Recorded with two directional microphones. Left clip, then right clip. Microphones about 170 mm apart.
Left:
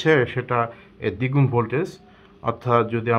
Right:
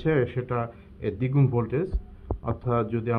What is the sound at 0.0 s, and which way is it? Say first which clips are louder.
Speech: left 6 dB; 30° left (ahead or behind).